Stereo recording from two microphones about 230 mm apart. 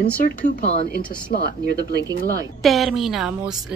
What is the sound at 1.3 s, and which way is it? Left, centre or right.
Speech, left.